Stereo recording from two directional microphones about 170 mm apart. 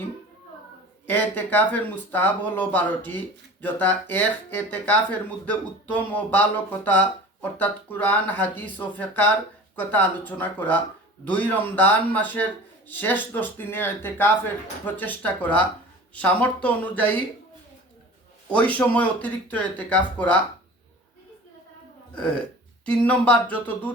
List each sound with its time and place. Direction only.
1.0 s speech: 10° left (ahead or behind)
18.5 s speech: 10° left (ahead or behind)
22.1 s speech: 5° left (ahead or behind)